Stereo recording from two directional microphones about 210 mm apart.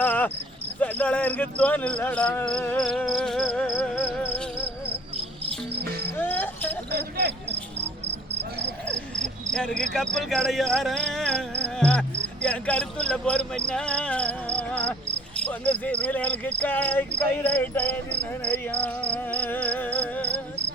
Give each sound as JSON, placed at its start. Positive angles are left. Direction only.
{"t": 0.0, "sound": "cricket", "side_deg": 10}
{"t": 5.1, "sound": "cricket", "side_deg": -25}
{"t": 6.1, "sound": "cricket", "side_deg": 10}
{"t": 6.9, "sound": "cricket", "side_deg": -55}
{"t": 8.9, "sound": "cricket", "side_deg": 5}
{"t": 9.9, "sound": "speech", "side_deg": 0}
{"t": 15.4, "sound": "cricket", "side_deg": 5}